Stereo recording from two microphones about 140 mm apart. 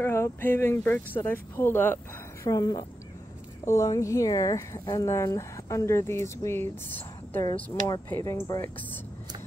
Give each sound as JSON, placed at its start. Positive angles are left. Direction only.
{"t": 0.0, "sound": "speech", "side_deg": 15}
{"t": 2.4, "sound": "speech", "side_deg": 25}
{"t": 7.8, "sound": "speech", "side_deg": 20}